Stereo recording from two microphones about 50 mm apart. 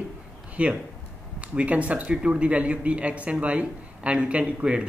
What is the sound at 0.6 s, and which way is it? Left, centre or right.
A man's voice, right.